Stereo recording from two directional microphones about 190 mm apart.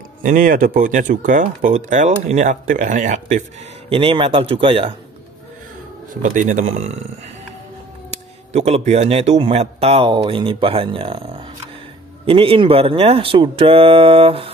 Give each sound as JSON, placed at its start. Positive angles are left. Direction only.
{"t": 0.2, "sound": "speech", "side_deg": -45}
{"t": 3.9, "sound": "speech", "side_deg": -30}
{"t": 6.2, "sound": "speech", "side_deg": -45}
{"t": 8.5, "sound": "speech", "side_deg": -35}